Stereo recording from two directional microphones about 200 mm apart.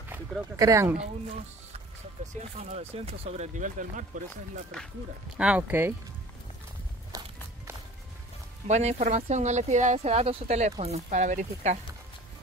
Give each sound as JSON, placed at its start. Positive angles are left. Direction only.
{"t": 0.6, "sound": "speech", "side_deg": -15}
{"t": 2.5, "sound": "speech", "side_deg": -30}
{"t": 5.4, "sound": "speech", "side_deg": -5}
{"t": 7.1, "sound": "walk", "side_deg": -20}
{"t": 8.6, "sound": "speech", "side_deg": -35}